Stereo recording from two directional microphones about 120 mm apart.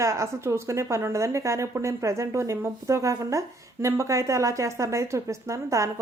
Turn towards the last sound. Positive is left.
turn(degrees=-25)  # may be behind; listen again after turning